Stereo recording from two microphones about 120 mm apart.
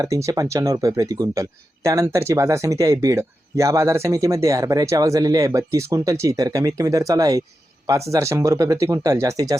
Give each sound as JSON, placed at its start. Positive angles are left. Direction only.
{"t": 0.0, "sound": "speech", "side_deg": -25}